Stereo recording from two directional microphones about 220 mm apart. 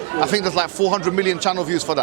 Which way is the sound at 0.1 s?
20° right (ahead or behind).